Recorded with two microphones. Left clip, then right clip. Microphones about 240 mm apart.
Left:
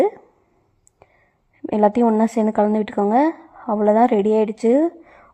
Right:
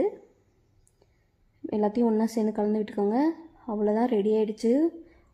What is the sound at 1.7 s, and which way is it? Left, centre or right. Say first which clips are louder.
A woman's voice: left 9 dB; left.